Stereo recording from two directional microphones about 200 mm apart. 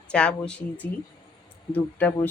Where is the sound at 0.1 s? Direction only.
5° left (ahead or behind).